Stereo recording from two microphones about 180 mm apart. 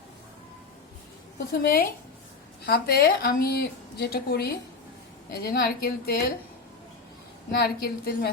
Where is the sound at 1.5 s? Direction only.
60° left (ahead or behind).